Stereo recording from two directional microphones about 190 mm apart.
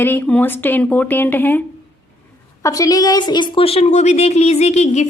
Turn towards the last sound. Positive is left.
turn(degrees=35)  # may be behind; listen again after turning